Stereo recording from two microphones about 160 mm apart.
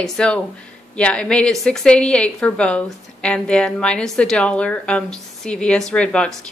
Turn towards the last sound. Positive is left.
turn(degrees=5)  # may be behind; listen again after turning